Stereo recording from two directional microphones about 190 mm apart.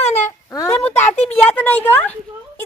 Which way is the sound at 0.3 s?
15° left (ahead or behind).